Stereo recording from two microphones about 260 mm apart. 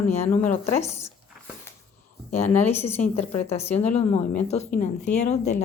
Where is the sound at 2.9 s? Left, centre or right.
Left.